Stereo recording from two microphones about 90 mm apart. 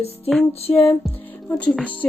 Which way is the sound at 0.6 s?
90° left.